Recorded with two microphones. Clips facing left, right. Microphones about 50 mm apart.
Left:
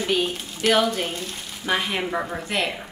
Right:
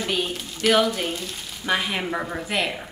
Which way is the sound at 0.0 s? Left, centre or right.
Centre.